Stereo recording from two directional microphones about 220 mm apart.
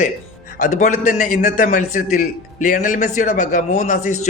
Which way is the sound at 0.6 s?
35° left (ahead or behind).